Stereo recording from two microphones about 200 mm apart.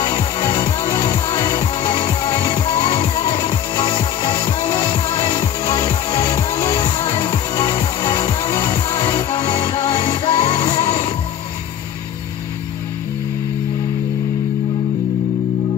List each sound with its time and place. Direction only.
0.0 s music: 25° left (ahead or behind)